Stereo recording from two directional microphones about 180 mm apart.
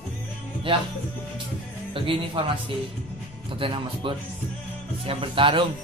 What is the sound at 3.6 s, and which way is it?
Speech, 30° right (ahead or behind).